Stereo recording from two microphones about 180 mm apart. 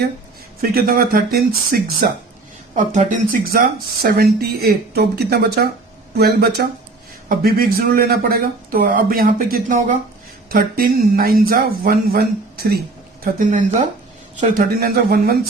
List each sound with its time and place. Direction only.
0.6 s speech: 55° right (ahead or behind)
2.7 s speech: 45° right (ahead or behind)
4.0 s speech: 60° right (ahead or behind)
13.2 s speech: 45° right (ahead or behind)